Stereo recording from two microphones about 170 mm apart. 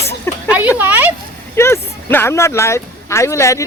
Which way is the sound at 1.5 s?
15° left (ahead or behind).